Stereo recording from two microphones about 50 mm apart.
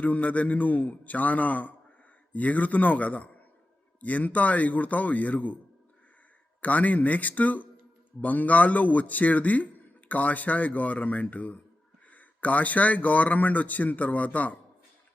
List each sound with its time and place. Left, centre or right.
0.0 s speech: left
6.6 s speech: left